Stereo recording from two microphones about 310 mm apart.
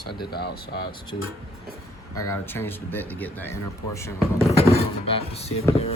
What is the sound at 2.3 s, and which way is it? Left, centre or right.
Speech, centre.